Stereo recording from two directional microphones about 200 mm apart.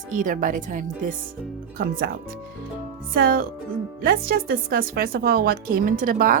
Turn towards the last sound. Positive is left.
turn(degrees=-45)  # may be behind; listen again after turning